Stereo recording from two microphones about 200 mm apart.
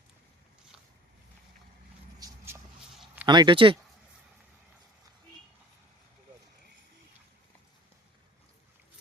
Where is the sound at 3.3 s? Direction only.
25° right (ahead or behind).